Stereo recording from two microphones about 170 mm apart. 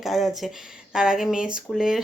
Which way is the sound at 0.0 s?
Centre (ahead or behind).